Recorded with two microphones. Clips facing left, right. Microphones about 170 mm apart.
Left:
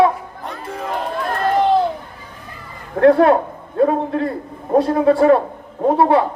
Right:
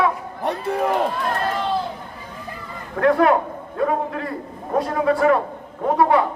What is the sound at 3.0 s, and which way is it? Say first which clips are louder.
A man's voice: left 5 dB; 30° left (ahead or behind).